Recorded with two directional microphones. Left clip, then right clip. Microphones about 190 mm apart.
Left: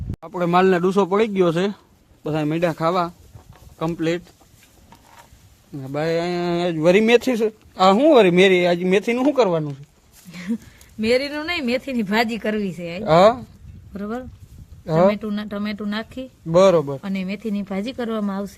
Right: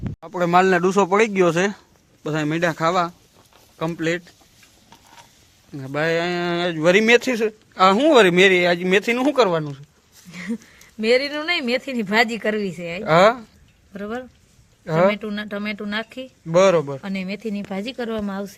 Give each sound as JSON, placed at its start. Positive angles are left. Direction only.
{"t": 0.2, "sound": "speech", "side_deg": 0}
{"t": 5.7, "sound": "speech", "side_deg": -5}
{"t": 10.3, "sound": "a sound", "side_deg": -20}
{"t": 11.0, "sound": "speech", "side_deg": -15}
{"t": 13.1, "sound": "speech", "side_deg": 5}
{"t": 16.8, "sound": "speech", "side_deg": 0}